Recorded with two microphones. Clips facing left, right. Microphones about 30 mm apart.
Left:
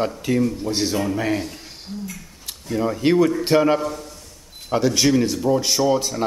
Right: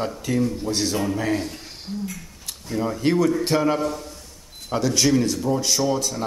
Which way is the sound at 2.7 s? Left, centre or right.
Centre.